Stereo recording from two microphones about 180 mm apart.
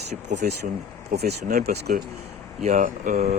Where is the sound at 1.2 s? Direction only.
60° right (ahead or behind).